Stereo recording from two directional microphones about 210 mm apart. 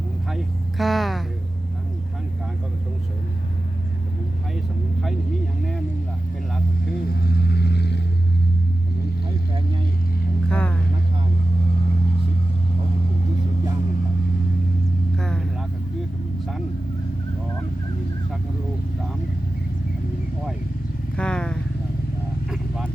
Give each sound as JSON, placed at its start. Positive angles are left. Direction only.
{"t": 0.3, "sound": "vehicle", "side_deg": 0}
{"t": 7.1, "sound": "vehicle", "side_deg": 45}
{"t": 10.5, "sound": "vehicle", "side_deg": 5}
{"t": 15.2, "sound": "vehicle", "side_deg": 5}
{"t": 21.2, "sound": "vehicle", "side_deg": 5}